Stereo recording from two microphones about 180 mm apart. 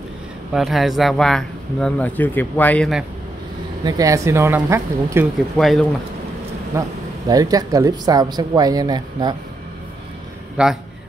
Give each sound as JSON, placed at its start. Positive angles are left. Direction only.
{"t": 0.5, "sound": "speech", "side_deg": 0}
{"t": 3.8, "sound": "speech", "side_deg": -20}
{"t": 5.6, "sound": "speech", "side_deg": 0}
{"t": 6.7, "sound": "speech", "side_deg": -15}
{"t": 10.6, "sound": "speech", "side_deg": -5}